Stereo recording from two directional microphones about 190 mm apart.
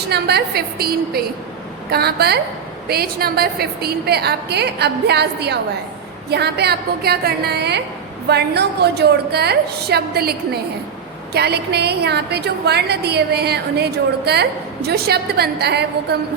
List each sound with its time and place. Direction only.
0.1 s a woman's voice: 60° right (ahead or behind)